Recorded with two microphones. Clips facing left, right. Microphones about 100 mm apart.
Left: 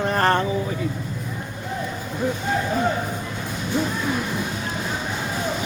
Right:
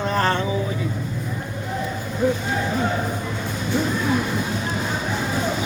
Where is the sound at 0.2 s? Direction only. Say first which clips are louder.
Left 2 dB; 50° left (ahead or behind).